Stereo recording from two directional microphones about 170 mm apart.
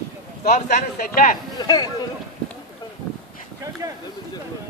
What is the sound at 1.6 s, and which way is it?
Speech, 25° left (ahead or behind).